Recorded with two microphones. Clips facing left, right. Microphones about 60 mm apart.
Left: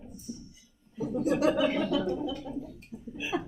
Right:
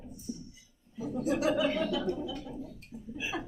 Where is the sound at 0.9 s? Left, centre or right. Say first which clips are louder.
Left 3 dB; left.